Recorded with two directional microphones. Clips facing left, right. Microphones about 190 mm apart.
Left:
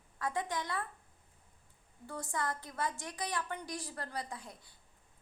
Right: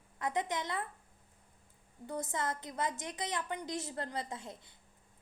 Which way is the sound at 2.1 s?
20° right (ahead or behind).